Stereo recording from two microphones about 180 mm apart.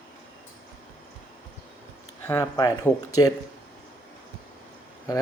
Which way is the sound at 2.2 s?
20° left (ahead or behind).